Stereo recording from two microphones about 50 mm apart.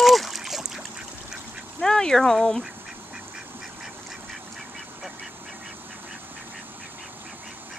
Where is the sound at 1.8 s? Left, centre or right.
Centre.